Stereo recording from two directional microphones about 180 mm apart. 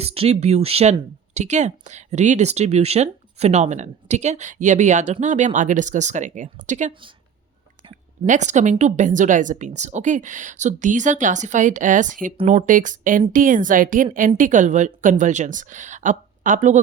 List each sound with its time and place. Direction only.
0.0 s speech: 35° right (ahead or behind)
8.3 s a woman's voice: 40° right (ahead or behind)